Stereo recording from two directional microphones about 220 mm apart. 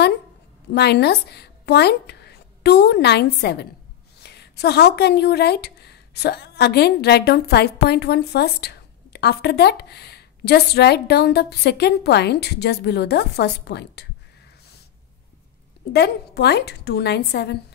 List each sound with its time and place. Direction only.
0.7 s a woman's voice: 50° left (ahead or behind)
15.9 s a woman's voice: 50° left (ahead or behind)